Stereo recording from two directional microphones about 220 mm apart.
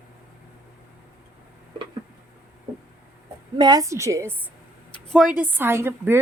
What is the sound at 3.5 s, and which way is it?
Speech, 20° right (ahead or behind).